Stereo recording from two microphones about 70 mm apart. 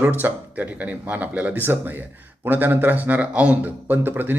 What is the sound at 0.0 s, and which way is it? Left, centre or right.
Speech, right.